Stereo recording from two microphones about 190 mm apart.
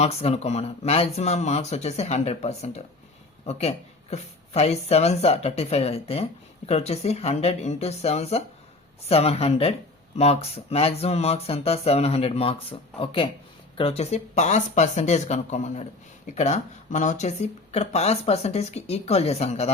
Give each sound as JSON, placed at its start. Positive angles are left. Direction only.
{"t": 0.0, "sound": "speech", "side_deg": 30}